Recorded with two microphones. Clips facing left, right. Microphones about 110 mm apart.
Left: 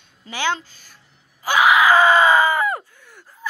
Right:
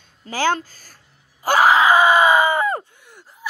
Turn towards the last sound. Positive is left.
turn(degrees=-15)  # may be behind; listen again after turning